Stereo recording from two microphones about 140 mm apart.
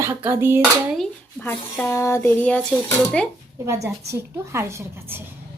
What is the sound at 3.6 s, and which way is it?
A woman's voice, 25° right (ahead or behind).